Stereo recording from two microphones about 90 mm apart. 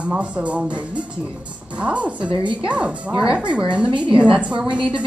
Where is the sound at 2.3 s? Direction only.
70° right (ahead or behind).